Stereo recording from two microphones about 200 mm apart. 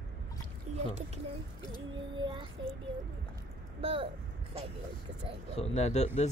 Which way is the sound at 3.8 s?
30° right (ahead or behind).